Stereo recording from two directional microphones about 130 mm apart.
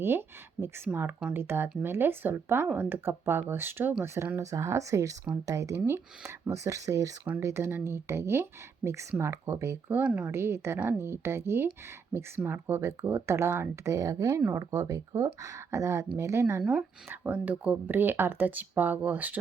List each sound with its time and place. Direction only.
0.0 s speech: 15° right (ahead or behind)